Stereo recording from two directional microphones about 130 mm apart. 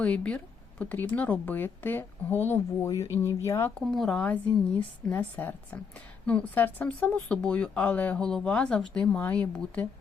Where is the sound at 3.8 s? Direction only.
5° left (ahead or behind).